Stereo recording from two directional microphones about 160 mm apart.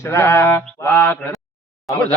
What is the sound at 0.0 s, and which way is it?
Mantra, 15° left (ahead or behind).